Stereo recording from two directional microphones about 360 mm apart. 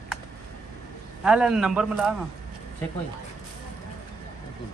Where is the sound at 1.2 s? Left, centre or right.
Centre.